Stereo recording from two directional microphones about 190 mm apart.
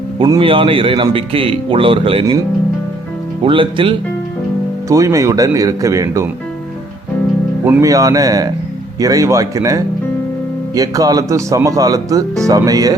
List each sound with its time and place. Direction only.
0.2 s speech: 25° right (ahead or behind)
3.4 s speech: 25° right (ahead or behind)
4.9 s speech: 15° right (ahead or behind)
7.6 s speech: 15° right (ahead or behind)